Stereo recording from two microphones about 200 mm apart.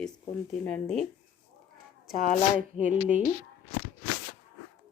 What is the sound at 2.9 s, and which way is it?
Speech, 5° right (ahead or behind).